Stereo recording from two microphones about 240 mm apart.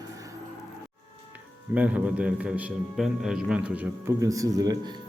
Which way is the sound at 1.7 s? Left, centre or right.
Centre.